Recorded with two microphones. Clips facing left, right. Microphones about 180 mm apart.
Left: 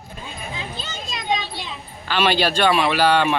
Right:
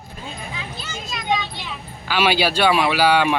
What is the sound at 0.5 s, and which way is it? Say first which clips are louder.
Children playing: left 1 dB; 25° left (ahead or behind).